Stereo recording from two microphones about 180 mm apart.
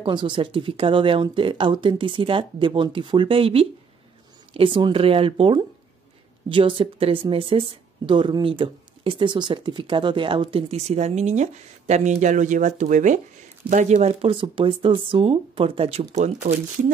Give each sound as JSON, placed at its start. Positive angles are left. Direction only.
{"t": 0.0, "sound": "speech", "side_deg": -25}